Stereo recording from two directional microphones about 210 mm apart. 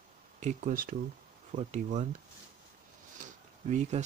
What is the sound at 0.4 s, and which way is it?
Speech, 35° right (ahead or behind).